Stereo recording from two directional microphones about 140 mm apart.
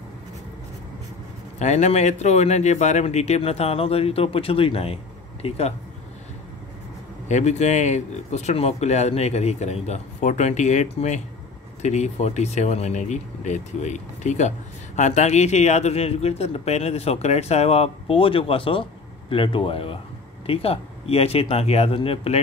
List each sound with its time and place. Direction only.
1.6 s speech: 55° left (ahead or behind)
7.2 s speech: 55° left (ahead or behind)